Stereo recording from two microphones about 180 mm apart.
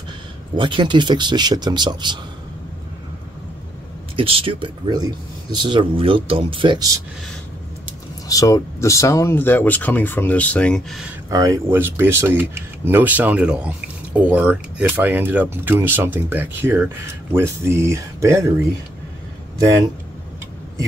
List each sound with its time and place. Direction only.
0.6 s speech: 25° right (ahead or behind)
4.2 s speech: 30° right (ahead or behind)
8.3 s speech: 20° left (ahead or behind); by 11.1 s 5° left (ahead or behind)
11.2 s speech: 20° right (ahead or behind)